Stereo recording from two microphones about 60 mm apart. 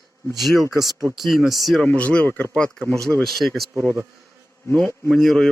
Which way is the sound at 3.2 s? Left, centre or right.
Centre.